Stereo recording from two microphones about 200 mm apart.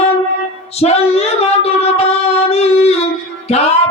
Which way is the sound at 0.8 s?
30° left (ahead or behind).